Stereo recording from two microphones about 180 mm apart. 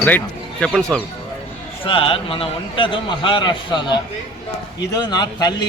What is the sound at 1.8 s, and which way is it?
Speech, 30° left (ahead or behind).